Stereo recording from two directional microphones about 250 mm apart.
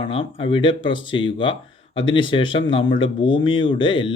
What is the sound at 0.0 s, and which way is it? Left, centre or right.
Speech, left.